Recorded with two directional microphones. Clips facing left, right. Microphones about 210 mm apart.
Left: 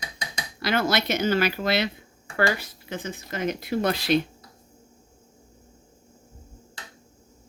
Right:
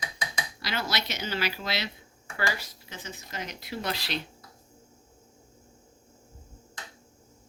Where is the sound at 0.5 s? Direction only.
55° left (ahead or behind).